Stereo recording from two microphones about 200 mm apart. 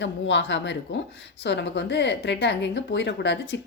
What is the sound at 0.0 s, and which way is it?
A woman's voice, 65° left (ahead or behind).